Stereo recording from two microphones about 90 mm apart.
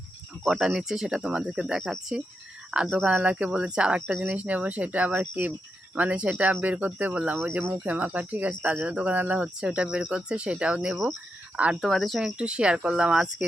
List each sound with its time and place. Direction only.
0.4 s speech: 5° right (ahead or behind)
11.8 s speech: centre (ahead or behind)
12.4 s speech: 10° right (ahead or behind)